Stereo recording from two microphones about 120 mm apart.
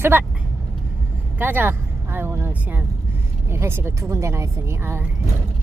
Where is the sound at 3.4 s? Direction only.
20° right (ahead or behind).